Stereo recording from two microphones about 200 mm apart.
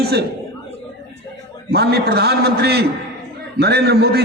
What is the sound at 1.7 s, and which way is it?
A man's voice, 55° right (ahead or behind).